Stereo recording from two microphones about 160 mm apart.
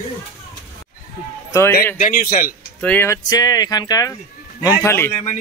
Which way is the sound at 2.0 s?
60° left (ahead or behind).